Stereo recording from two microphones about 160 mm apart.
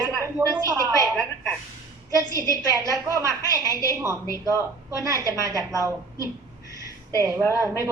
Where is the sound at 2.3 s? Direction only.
20° right (ahead or behind).